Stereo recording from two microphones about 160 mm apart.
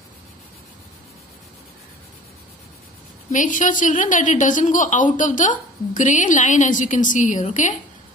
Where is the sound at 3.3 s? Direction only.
55° left (ahead or behind).